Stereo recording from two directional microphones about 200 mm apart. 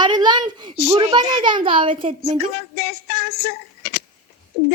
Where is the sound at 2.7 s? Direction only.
55° left (ahead or behind).